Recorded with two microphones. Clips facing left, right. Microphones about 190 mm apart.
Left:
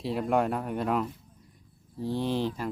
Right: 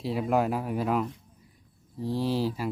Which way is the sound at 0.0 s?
Centre (ahead or behind).